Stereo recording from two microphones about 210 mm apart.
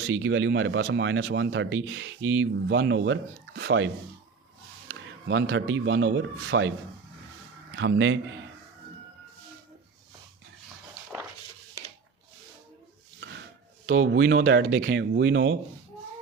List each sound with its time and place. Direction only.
0.0 s a man's voice: 60° right (ahead or behind)
7.8 s speech: 65° right (ahead or behind)
13.1 s a sound: 55° right (ahead or behind)
13.8 s speech: 60° right (ahead or behind)